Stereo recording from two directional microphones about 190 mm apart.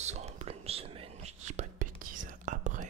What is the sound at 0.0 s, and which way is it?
Whispering, 35° right (ahead or behind).